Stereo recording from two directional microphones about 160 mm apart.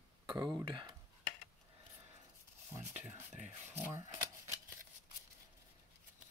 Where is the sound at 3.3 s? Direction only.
45° right (ahead or behind).